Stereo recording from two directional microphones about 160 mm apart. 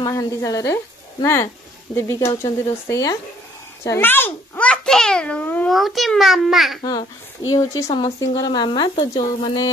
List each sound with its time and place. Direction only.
0.0 s a child's voice: 20° left (ahead or behind); by 6.8 s centre (ahead or behind)
6.8 s speech: 25° left (ahead or behind)